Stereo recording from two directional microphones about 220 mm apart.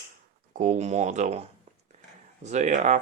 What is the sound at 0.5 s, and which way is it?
Speech, 35° right (ahead or behind).